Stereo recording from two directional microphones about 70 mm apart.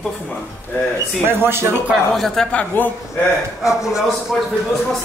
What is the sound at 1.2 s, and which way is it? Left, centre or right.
Speech, right.